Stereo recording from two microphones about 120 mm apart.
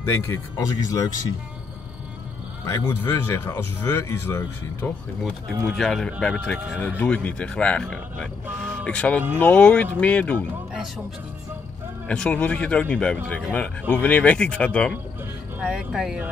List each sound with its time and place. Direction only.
0.0 s speech: 20° left (ahead or behind)
2.7 s speech: 20° left (ahead or behind)
5.7 s speech: 5° left (ahead or behind)
12.1 s speech: 10° left (ahead or behind)
15.7 s speech: 5° right (ahead or behind)